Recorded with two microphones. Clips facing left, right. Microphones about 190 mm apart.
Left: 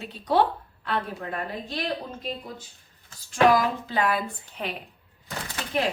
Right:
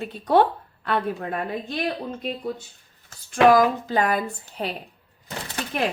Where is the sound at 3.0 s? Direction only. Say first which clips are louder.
Right 4 dB; 50° right (ahead or behind).